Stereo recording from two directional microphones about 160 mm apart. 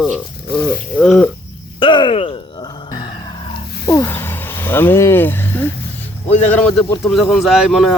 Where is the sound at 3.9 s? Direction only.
15° left (ahead or behind); by 7.9 s centre (ahead or behind).